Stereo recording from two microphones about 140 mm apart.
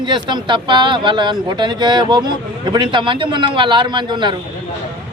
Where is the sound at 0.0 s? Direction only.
35° right (ahead or behind).